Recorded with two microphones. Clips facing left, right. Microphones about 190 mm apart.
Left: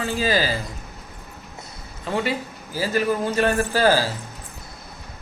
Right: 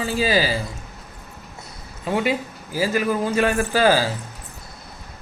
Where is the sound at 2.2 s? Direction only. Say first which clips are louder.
Right 3 dB; 15° right (ahead or behind).